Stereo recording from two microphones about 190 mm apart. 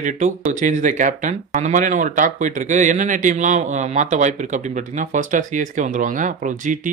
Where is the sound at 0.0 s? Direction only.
40° right (ahead or behind).